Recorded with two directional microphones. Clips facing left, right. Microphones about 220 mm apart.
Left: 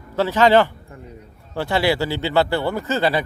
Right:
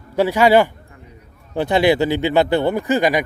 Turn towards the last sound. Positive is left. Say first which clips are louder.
# right 3 dB
turn(degrees=-15)  # may be behind; listen again after turning